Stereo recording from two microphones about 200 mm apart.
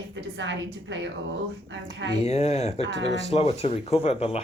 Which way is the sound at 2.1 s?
35° left (ahead or behind).